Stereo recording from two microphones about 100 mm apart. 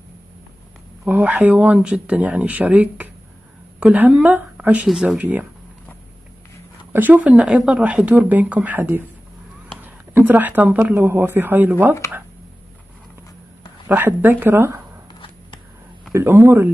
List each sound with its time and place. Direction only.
1.0 s speech: 15° right (ahead or behind)
5.2 s speech: 20° right (ahead or behind)
6.9 s speech: 20° right (ahead or behind)
12.0 s speech: 30° left (ahead or behind)
13.8 s speech: 20° right (ahead or behind)
15.1 s a sound: 60° left (ahead or behind)
16.1 s speech: 25° right (ahead or behind)